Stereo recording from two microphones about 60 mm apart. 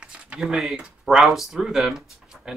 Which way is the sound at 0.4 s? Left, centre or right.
Centre.